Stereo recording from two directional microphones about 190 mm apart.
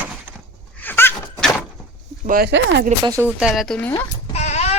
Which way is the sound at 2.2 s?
50° right (ahead or behind).